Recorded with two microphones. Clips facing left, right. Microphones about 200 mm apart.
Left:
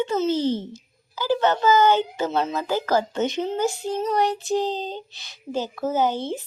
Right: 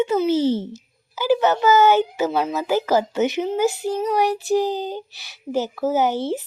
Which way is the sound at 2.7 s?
20° right (ahead or behind).